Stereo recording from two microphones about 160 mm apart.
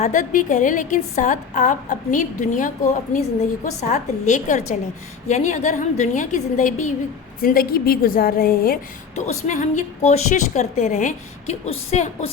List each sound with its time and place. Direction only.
0.0 s a woman's voice: 55° left (ahead or behind)
7.4 s a woman's voice: 65° left (ahead or behind)
9.1 s a woman's voice: 50° left (ahead or behind)